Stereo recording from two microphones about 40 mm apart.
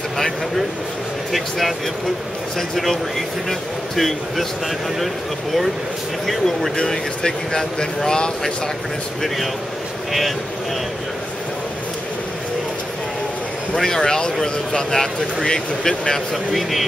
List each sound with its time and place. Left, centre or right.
1.3 s speech: centre
6.2 s speech: centre
13.7 s speech: centre